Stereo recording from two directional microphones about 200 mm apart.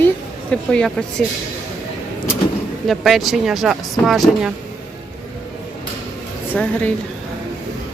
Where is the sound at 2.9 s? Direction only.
Centre (ahead or behind).